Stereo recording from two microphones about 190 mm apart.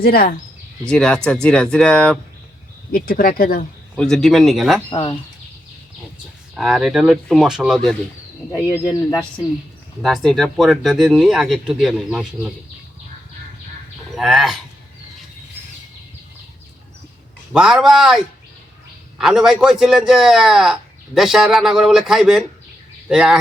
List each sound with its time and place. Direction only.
0.0 s speech: 55° left (ahead or behind)
0.9 s speech: 5° left (ahead or behind)
2.9 s speech: 50° left (ahead or behind)
3.9 s speech: centre (ahead or behind)
4.9 s speech: 25° left (ahead or behind)
6.6 s speech: 5° right (ahead or behind)
8.7 s speech: 15° left (ahead or behind)
10.0 s speech: centre (ahead or behind)
14.2 s speech: centre (ahead or behind)
17.5 s speech: 5° right (ahead or behind)
19.2 s speech: 5° right (ahead or behind)